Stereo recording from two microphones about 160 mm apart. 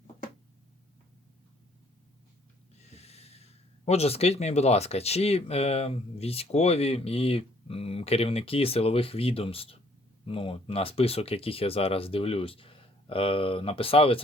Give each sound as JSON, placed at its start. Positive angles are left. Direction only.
{"t": 2.9, "sound": "snort", "side_deg": 40}
{"t": 3.8, "sound": "speech", "side_deg": 40}